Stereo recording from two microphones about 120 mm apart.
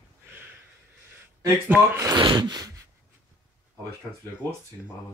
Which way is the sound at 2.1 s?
40° right (ahead or behind).